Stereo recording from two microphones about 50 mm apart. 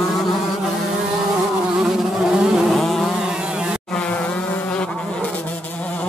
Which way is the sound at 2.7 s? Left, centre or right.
Centre.